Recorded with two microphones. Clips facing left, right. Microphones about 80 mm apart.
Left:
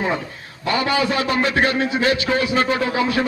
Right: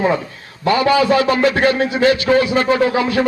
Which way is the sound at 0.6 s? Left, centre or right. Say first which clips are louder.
Right 6 dB; right.